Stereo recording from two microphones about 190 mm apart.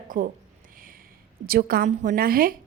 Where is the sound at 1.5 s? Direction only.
55° right (ahead or behind).